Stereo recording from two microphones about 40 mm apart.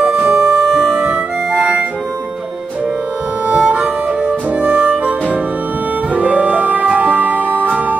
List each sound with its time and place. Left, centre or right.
0.0 s music: right
0.7 s music: centre
0.9 s music: right
3.4 s music: right